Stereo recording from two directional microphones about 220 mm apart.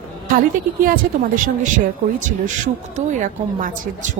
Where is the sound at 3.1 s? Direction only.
35° right (ahead or behind).